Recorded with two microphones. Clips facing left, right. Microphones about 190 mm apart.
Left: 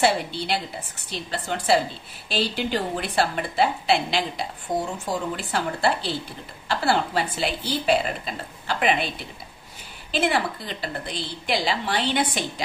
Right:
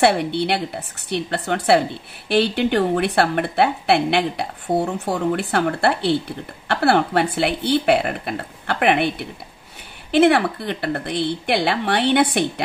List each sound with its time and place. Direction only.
0.0 s a woman's voice: 65° right (ahead or behind)